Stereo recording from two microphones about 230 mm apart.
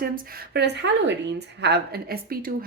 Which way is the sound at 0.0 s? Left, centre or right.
Right.